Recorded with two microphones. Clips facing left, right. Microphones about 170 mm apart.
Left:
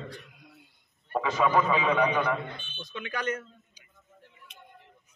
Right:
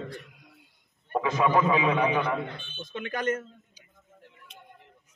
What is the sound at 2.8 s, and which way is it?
A man's voice, 50° right (ahead or behind).